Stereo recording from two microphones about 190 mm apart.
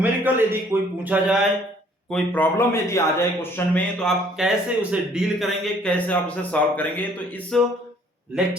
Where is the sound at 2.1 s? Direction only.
10° left (ahead or behind).